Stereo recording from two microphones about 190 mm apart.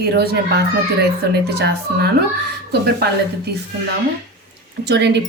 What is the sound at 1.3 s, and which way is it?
Speech, 60° right (ahead or behind).